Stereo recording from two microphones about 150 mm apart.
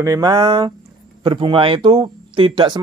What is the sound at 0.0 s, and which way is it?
Speech, 25° right (ahead or behind).